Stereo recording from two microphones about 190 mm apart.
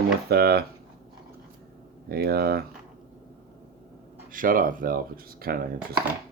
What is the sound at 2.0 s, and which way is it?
Speech, 55° right (ahead or behind).